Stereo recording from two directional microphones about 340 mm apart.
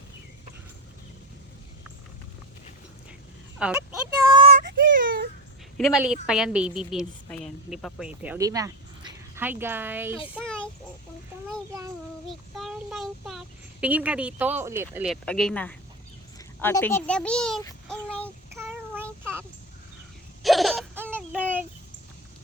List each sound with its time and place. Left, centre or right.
3.6 s a woman's voice: centre
4.3 s child singing: centre
5.7 s a woman's voice: centre
10.3 s child singing: centre
11.4 s a child's voice: centre
12.3 s child singing: centre
13.8 s a woman's voice: centre
18.5 s child singing: centre
19.2 s a sound: centre
20.4 s hiccup: centre